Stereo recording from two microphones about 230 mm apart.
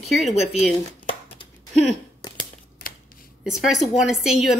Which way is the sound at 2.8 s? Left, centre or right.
Left.